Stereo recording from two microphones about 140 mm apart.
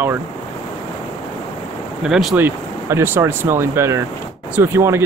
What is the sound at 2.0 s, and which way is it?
Speech, centre (ahead or behind).